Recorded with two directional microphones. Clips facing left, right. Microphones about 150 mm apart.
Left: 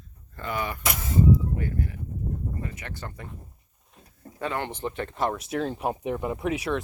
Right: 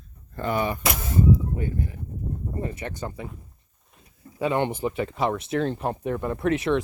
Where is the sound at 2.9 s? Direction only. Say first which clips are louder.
Right 5 dB; 15° right (ahead or behind).